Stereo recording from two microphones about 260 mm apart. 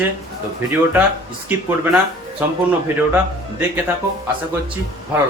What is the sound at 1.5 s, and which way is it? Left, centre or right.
Speech, centre.